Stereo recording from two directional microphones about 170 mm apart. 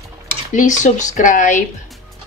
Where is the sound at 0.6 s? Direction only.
45° left (ahead or behind).